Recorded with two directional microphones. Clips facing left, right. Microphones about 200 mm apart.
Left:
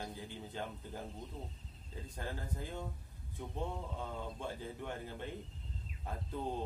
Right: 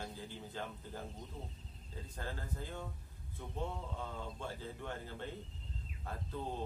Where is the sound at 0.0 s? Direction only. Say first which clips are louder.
Left 1 dB; 20° left (ahead or behind).